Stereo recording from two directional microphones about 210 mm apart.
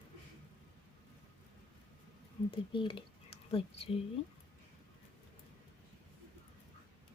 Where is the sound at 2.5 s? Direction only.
25° left (ahead or behind).